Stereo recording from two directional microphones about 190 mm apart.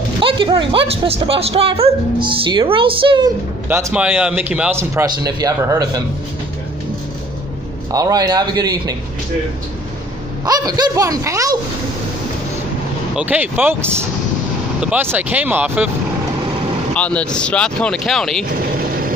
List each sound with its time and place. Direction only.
0.2 s speech: 25° right (ahead or behind)
3.6 s speech: 5° right (ahead or behind)
7.9 s speech: 20° right (ahead or behind)
10.4 s speech: 20° right (ahead or behind)
13.1 s speech: 5° right (ahead or behind)
16.9 s speech: 5° left (ahead or behind)